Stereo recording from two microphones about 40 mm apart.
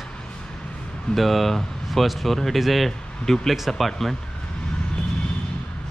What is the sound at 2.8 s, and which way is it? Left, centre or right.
A man's voice, centre.